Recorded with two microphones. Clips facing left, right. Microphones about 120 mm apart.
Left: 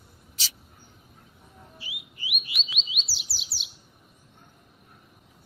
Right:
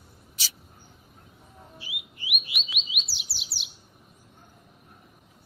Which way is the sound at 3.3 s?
60° right (ahead or behind).